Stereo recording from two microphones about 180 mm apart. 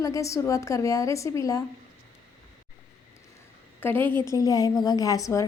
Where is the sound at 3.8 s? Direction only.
10° left (ahead or behind).